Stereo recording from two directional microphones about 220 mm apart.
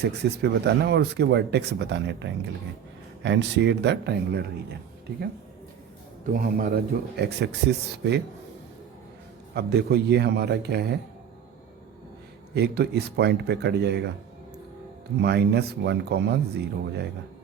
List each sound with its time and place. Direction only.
0.0 s speech: 50° right (ahead or behind)
6.3 s speech: 40° right (ahead or behind)
9.6 s speech: 50° right (ahead or behind)
12.5 s speech: 45° right (ahead or behind)
15.2 s speech: 50° right (ahead or behind)